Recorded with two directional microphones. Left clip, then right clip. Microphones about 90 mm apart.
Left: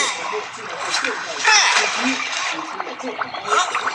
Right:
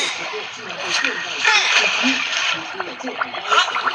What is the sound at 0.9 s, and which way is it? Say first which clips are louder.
Speech: right 2 dB; 20° right (ahead or behind).